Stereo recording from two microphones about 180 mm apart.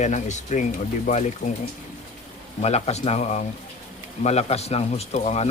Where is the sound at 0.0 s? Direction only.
40° left (ahead or behind).